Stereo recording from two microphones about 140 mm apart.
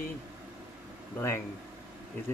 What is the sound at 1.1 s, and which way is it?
Speech, 15° left (ahead or behind).